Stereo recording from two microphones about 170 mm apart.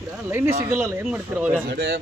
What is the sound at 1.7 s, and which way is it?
Speech, 75° right (ahead or behind).